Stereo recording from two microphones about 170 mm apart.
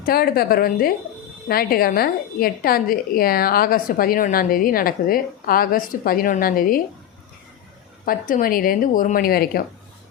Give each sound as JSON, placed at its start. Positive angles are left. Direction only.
{"t": 0.0, "sound": "a woman's voice", "side_deg": 65}
{"t": 8.0, "sound": "a woman's voice", "side_deg": 55}